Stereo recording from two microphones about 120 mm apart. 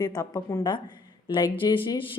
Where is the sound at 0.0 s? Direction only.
30° left (ahead or behind).